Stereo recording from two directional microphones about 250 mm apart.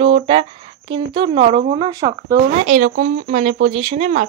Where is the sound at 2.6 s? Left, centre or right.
Right.